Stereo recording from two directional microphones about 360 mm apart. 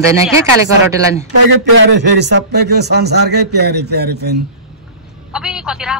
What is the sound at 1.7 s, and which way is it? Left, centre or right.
A man's voice, right.